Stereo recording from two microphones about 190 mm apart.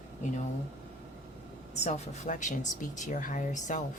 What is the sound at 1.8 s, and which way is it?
Speech, 40° left (ahead or behind).